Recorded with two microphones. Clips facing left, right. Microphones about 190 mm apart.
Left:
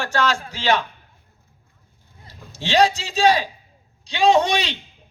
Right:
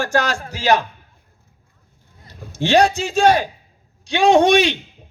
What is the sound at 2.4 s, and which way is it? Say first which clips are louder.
Speech: right 3 dB; 55° right (ahead or behind).